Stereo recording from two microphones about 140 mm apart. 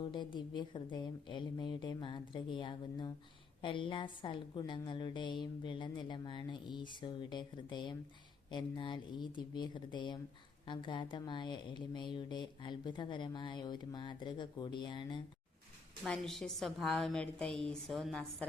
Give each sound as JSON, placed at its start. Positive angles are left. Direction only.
{"t": 0.0, "sound": "a woman's voice", "side_deg": 35}
{"t": 16.0, "sound": "a woman's voice", "side_deg": 5}